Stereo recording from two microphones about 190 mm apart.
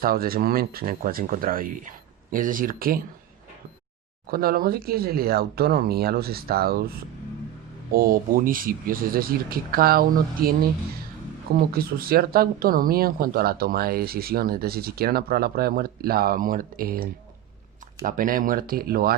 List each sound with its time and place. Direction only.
0.0 s speech: 50° right (ahead or behind)
4.3 s speech: 50° right (ahead or behind)
11.7 s speech: 50° right (ahead or behind)